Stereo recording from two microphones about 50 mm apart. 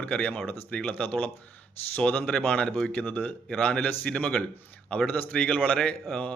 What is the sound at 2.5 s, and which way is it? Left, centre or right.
Speech, left.